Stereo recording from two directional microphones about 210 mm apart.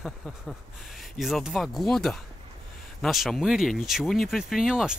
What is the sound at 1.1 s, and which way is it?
Speech, centre (ahead or behind).